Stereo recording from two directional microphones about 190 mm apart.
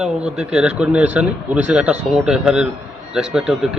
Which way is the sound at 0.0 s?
5° right (ahead or behind).